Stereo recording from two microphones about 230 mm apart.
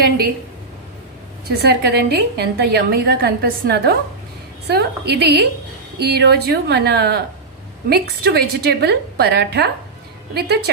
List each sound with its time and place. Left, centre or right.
1.5 s a woman's voice: right